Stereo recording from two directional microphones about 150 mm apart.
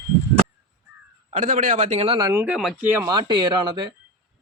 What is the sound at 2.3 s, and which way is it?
Speech, 15° right (ahead or behind).